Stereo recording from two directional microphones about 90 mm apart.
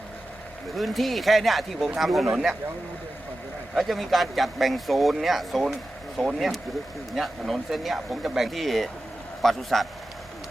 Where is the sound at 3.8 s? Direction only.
Centre (ahead or behind).